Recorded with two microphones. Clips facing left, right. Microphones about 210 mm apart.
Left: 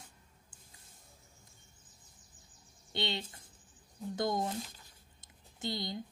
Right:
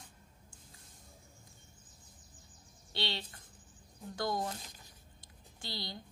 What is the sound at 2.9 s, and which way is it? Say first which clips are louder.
Speech: left 3 dB; 20° left (ahead or behind).